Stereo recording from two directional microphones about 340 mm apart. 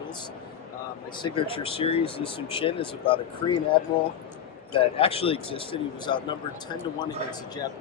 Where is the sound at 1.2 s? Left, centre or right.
Centre.